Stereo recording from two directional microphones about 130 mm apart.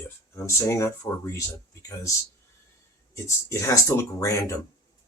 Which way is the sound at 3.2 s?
25° left (ahead or behind).